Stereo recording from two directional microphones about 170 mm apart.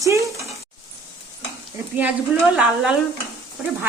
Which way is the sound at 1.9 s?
10° right (ahead or behind).